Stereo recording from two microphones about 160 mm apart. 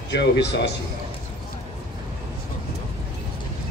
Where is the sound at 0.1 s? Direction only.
90° left.